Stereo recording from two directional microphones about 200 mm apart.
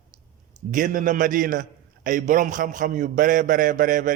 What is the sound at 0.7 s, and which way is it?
A man's voice, 40° right (ahead or behind).